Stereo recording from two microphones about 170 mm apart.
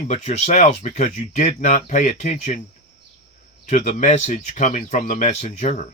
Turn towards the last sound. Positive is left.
turn(degrees=45)  # may be behind; listen again after turning